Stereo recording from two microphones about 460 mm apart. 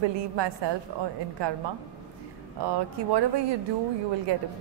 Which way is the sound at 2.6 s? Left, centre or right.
Right.